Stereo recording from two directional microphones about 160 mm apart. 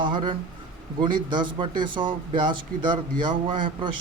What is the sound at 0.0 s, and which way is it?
Speech, 30° right (ahead or behind).